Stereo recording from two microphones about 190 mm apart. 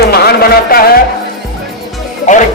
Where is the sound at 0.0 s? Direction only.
55° left (ahead or behind).